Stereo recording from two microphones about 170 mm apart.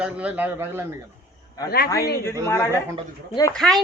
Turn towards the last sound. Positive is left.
turn(degrees=5)  # may be behind; listen again after turning